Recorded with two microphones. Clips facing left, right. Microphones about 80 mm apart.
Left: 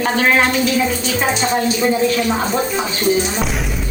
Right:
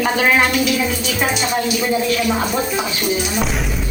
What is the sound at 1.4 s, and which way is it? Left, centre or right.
Speech, left.